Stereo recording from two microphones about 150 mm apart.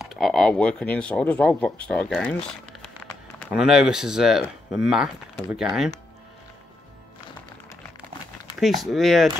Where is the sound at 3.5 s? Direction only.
5° right (ahead or behind).